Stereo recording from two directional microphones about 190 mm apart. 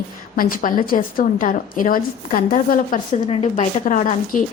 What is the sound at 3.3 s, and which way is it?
A woman's voice, 35° left (ahead or behind).